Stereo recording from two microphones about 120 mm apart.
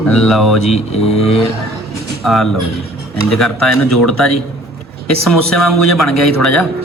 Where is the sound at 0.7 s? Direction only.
60° left (ahead or behind).